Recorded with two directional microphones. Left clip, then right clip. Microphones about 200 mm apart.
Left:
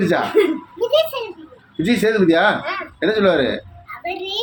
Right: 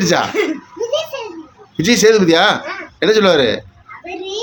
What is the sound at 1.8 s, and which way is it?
A man's voice, 25° right (ahead or behind).